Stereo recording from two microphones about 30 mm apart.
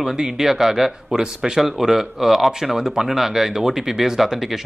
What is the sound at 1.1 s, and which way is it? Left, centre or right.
Speech, right.